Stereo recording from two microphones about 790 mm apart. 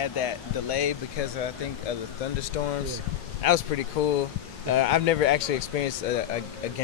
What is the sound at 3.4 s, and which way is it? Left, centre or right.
Speech, left.